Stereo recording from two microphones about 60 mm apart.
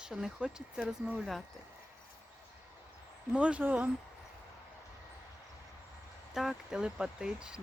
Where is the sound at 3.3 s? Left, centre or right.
Right.